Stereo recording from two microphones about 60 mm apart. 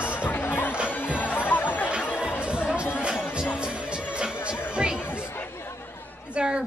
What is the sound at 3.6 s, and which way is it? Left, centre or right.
Music, centre.